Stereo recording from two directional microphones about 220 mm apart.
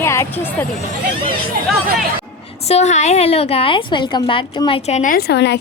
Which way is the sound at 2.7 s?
30° left (ahead or behind).